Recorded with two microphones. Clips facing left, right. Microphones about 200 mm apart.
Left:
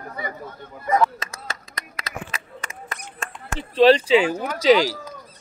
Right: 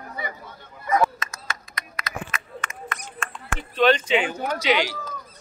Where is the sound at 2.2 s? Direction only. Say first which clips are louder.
Right 1 dB; 35° left (ahead or behind).